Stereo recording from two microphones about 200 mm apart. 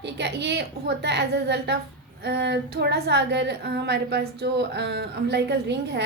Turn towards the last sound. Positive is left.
turn(degrees=-55)  # may be behind; listen again after turning